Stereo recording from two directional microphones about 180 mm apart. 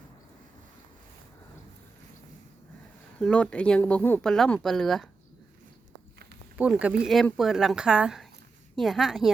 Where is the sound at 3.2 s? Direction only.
5° left (ahead or behind).